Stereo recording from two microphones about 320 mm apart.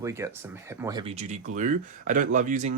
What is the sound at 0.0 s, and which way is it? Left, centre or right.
Speech, centre.